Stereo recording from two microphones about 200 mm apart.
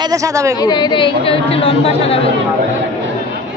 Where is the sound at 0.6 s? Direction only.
20° left (ahead or behind).